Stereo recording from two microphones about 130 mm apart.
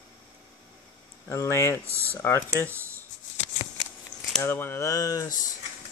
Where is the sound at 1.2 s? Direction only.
20° left (ahead or behind).